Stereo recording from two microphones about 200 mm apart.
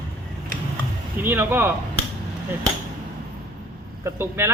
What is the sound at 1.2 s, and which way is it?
Speech, 10° right (ahead or behind).